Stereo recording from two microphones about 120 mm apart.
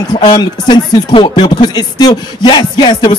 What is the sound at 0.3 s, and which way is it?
Speech, 35° left (ahead or behind).